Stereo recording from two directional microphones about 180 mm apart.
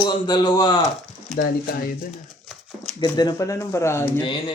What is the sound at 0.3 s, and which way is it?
Speech, 20° left (ahead or behind).